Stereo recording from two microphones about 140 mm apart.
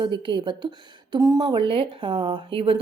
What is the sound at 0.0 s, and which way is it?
Speech, 35° right (ahead or behind).